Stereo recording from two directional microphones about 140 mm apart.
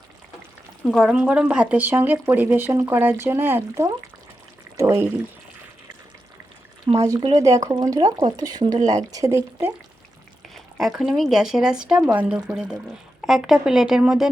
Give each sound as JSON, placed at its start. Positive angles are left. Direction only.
{"t": 0.9, "sound": "speech", "side_deg": 0}
{"t": 6.9, "sound": "speech", "side_deg": -40}
{"t": 7.3, "sound": "speech", "side_deg": -25}
{"t": 10.5, "sound": "speech", "side_deg": 0}